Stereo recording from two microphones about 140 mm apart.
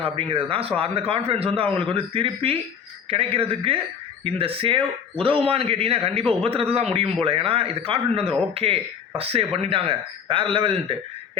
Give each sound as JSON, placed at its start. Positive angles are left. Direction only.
{"t": 0.0, "sound": "a man's voice", "side_deg": -40}